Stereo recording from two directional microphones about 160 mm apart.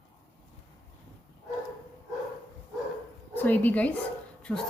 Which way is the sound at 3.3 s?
10° left (ahead or behind).